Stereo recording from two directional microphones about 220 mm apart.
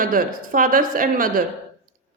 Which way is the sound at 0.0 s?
40° right (ahead or behind).